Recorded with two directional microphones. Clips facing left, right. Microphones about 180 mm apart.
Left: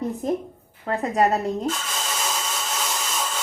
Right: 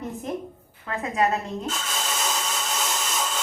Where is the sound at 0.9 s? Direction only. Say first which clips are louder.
Left 4 dB; 35° left (ahead or behind).